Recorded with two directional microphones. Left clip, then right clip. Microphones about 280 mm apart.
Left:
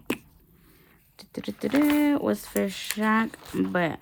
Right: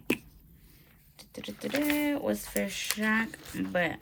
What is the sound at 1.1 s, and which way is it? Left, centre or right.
Speech, centre.